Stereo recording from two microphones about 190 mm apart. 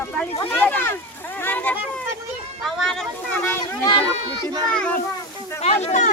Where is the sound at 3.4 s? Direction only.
10° left (ahead or behind).